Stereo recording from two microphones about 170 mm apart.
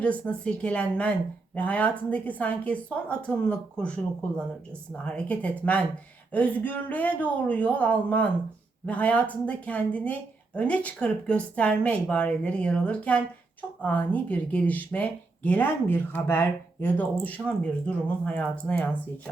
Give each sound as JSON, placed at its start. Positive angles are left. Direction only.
{"t": 0.0, "sound": "speech", "side_deg": 5}